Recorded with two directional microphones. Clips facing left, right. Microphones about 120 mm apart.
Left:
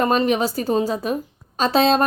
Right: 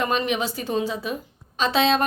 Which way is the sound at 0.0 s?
40° left (ahead or behind).